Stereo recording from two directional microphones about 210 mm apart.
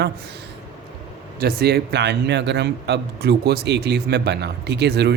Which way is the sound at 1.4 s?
50° right (ahead or behind).